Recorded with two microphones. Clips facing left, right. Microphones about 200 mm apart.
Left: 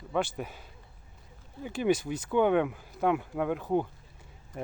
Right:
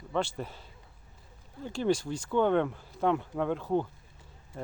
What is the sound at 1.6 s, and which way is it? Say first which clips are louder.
Speech: left 1 dB; 15° left (ahead or behind).